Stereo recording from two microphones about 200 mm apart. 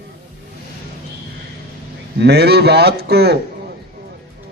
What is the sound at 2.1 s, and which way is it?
A man's voice, 55° right (ahead or behind).